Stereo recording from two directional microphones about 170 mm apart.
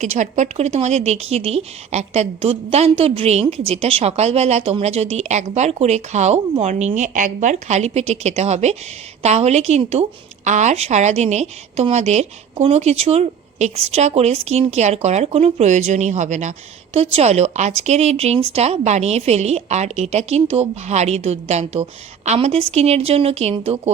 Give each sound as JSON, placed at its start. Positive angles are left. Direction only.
{"t": 0.0, "sound": "a woman's voice", "side_deg": -45}